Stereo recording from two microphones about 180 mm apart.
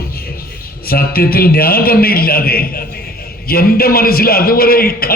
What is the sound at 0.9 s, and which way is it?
A man's voice, 55° left (ahead or behind).